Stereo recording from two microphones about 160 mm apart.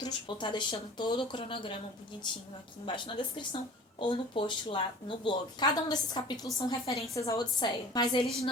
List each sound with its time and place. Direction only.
0.0 s speech: 30° left (ahead or behind)